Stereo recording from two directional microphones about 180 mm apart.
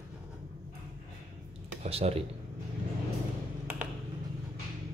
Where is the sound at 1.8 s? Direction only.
35° right (ahead or behind).